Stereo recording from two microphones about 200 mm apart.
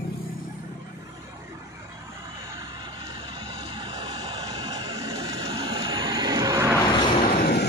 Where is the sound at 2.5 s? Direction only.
25° right (ahead or behind).